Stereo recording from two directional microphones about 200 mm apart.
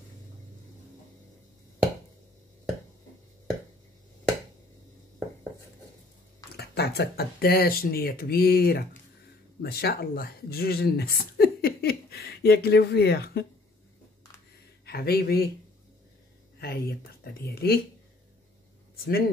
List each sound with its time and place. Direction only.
6.5 s speech: 55° left (ahead or behind)
14.9 s speech: 50° left (ahead or behind)
16.5 s a sound: 55° left (ahead or behind)
17.2 s speech: 50° left (ahead or behind)
19.0 s speech: 50° left (ahead or behind)